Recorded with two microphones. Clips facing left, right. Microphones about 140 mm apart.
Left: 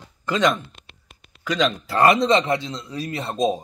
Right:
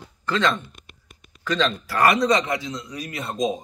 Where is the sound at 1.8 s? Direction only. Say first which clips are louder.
Left 3 dB; 25° left (ahead or behind).